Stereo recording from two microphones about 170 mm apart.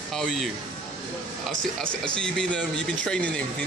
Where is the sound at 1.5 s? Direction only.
5° left (ahead or behind).